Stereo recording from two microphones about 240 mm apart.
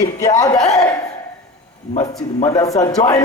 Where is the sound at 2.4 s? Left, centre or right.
Centre.